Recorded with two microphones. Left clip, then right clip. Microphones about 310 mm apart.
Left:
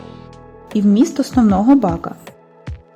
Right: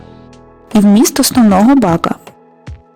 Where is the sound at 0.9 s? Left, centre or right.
Right.